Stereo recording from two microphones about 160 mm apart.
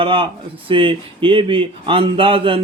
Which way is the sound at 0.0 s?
35° right (ahead or behind).